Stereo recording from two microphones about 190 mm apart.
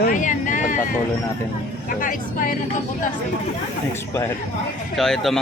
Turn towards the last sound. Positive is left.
turn(degrees=0)  # may be behind; listen again after turning